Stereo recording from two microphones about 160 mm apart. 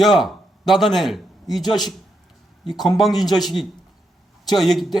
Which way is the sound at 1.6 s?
25° left (ahead or behind).